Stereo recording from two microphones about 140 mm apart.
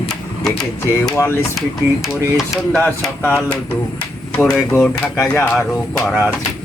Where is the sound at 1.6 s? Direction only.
Centre (ahead or behind).